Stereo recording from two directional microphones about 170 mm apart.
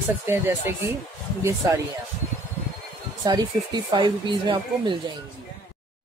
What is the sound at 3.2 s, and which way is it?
Speech, 25° right (ahead or behind).